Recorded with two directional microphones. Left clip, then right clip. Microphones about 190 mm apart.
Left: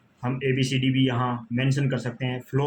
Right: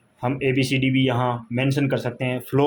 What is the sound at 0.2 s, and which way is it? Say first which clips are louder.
Speech: right 4 dB; 45° right (ahead or behind).